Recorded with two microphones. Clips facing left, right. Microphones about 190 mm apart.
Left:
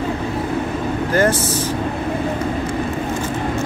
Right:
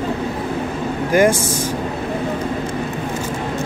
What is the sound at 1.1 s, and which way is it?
Speech, 10° right (ahead or behind).